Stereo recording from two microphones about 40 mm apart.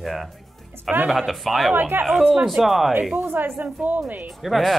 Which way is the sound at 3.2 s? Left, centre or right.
Right.